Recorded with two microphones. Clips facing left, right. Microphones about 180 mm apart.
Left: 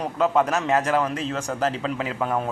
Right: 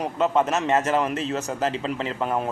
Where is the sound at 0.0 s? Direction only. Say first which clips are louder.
Left 1 dB; centre (ahead or behind).